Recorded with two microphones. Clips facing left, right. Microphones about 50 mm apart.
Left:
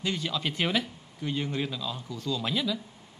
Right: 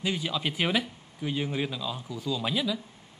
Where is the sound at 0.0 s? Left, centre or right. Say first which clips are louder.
Right 1 dB; centre.